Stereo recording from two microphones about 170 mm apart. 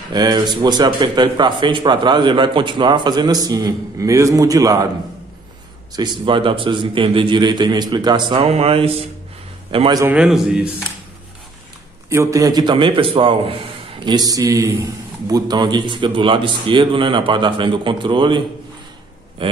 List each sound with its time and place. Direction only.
0.1 s a man's voice: 25° right (ahead or behind)
5.9 s a man's voice: 25° right (ahead or behind)
10.0 s speech: 5° right (ahead or behind)
12.1 s a man's voice: 15° right (ahead or behind)
19.4 s a man's voice: 30° right (ahead or behind)